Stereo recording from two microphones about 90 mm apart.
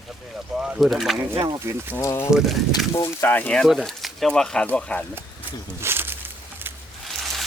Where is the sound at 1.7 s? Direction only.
30° right (ahead or behind).